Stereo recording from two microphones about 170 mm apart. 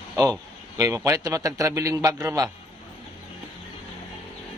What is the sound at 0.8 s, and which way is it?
A man's voice, 20° right (ahead or behind).